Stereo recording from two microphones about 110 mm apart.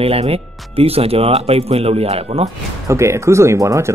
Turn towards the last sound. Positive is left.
turn(degrees=-25)  # may be behind; listen again after turning